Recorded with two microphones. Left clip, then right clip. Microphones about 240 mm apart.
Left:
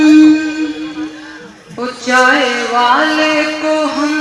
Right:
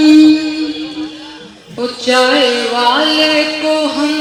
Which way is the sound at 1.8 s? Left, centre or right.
Right.